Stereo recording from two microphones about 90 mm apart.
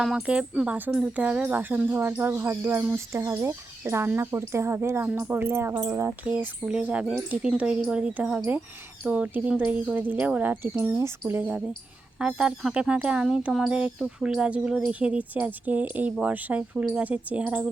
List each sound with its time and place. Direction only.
0.0 s speech: 10° right (ahead or behind); by 6.1 s 35° right (ahead or behind)
6.1 s speech: 15° right (ahead or behind)